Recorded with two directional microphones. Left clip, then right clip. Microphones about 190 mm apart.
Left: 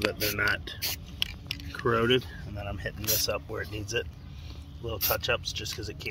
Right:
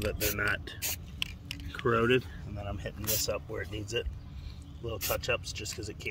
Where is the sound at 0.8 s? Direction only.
25° right (ahead or behind).